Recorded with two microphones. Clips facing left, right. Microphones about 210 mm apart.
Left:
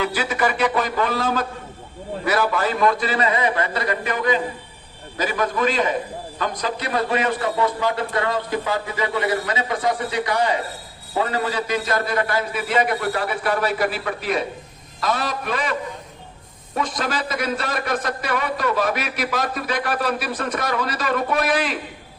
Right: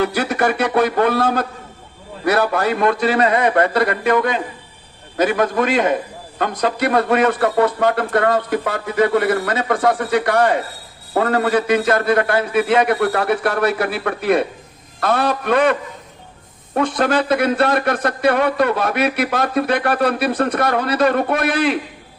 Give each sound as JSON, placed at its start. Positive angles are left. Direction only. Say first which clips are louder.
{"t": 0.0, "sound": "a man's voice", "louder": "right 4 dB", "side_deg": -60}